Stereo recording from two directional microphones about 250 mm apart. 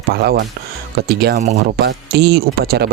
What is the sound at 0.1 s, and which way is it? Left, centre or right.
Speech, right.